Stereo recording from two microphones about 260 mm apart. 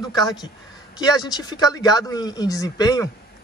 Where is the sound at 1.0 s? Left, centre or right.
Centre.